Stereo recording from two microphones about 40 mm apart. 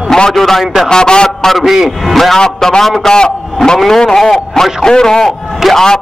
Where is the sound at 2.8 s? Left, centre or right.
Centre.